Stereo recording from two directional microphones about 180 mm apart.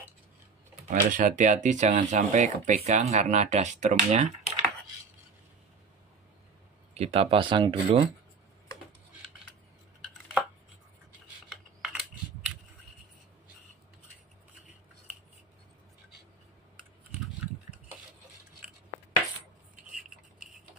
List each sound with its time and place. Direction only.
0.8 s speech: 45° right (ahead or behind)
6.9 s speech: 35° right (ahead or behind)
11.4 s a sound: centre (ahead or behind)